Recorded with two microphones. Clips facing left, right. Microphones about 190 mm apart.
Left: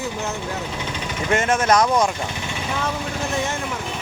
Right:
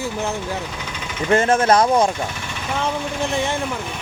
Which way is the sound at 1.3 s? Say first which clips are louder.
Right 3 dB; 35° right (ahead or behind).